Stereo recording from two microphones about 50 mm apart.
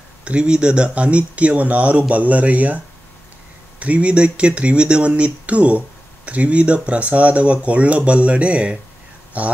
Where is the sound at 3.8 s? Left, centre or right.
Right.